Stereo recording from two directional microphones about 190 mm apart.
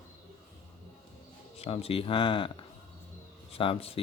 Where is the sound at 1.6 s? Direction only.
30° left (ahead or behind).